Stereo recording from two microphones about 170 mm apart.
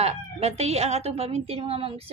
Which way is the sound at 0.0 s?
40° right (ahead or behind).